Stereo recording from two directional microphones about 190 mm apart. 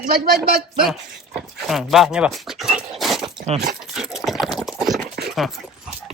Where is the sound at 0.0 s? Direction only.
55° right (ahead or behind).